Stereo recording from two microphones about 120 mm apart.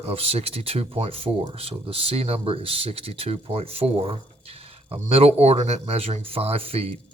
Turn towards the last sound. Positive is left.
turn(degrees=-55)  # may be behind; listen again after turning